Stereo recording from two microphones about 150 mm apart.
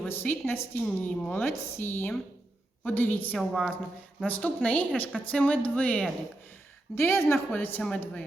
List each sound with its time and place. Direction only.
0.0 s a woman's voice: 10° left (ahead or behind)
3.3 s a woman's voice: centre (ahead or behind)